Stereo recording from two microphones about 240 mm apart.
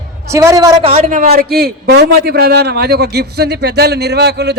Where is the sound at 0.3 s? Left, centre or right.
Centre.